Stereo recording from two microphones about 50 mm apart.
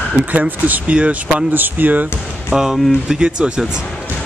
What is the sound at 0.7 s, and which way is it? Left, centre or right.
Speech, right.